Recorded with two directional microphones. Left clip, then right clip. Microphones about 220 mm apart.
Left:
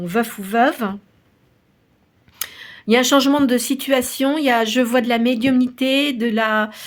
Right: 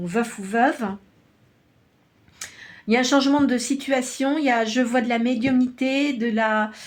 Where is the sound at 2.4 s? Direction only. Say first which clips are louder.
Left 6 dB; 35° left (ahead or behind).